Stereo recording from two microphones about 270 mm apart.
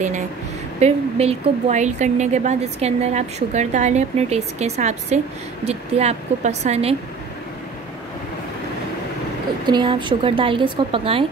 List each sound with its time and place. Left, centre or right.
0.7 s a woman's voice: right
9.7 s a woman's voice: centre